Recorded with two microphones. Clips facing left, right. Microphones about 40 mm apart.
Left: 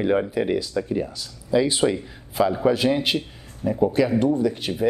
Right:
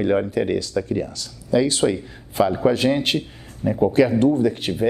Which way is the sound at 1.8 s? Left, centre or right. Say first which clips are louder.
Right 1 dB; centre.